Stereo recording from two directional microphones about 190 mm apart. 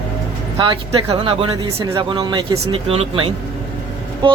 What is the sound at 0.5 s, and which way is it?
Speech, 25° right (ahead or behind).